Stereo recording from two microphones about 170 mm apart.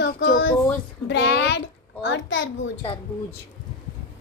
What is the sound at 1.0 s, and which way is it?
A child's voice, 90° left.